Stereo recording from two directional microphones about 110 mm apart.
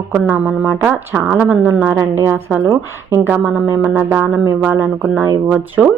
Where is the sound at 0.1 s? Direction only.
10° right (ahead or behind).